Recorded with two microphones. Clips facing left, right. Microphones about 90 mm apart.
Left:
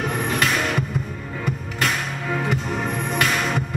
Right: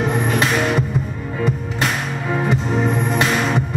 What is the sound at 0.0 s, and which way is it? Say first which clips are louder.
Music: right 4 dB; 25° right (ahead or behind).